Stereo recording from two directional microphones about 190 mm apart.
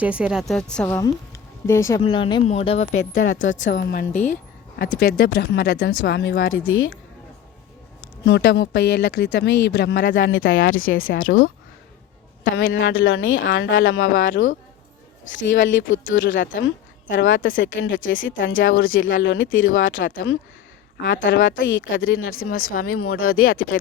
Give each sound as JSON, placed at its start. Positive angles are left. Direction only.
{"t": 0.0, "sound": "a woman's voice", "side_deg": -5}
{"t": 0.9, "sound": "speech", "side_deg": 15}
{"t": 2.0, "sound": "speech", "side_deg": 25}
{"t": 3.8, "sound": "speech", "side_deg": 50}
{"t": 6.7, "sound": "speech", "side_deg": 90}
{"t": 8.2, "sound": "speech", "side_deg": 65}
{"t": 10.2, "sound": "a woman's voice", "side_deg": 80}
{"t": 12.5, "sound": "speech", "side_deg": 85}
{"t": 15.4, "sound": "a woman's voice", "side_deg": 80}
{"t": 20.1, "sound": "speech", "side_deg": 65}
{"t": 21.2, "sound": "a woman's voice", "side_deg": 80}